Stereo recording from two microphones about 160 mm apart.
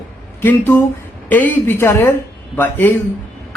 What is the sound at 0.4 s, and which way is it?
Speech, 10° left (ahead or behind).